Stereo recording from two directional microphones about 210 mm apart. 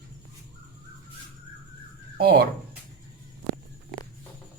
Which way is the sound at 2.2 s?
50° right (ahead or behind).